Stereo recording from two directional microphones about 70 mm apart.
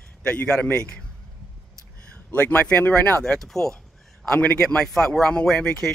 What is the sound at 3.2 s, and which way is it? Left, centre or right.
Speech, centre.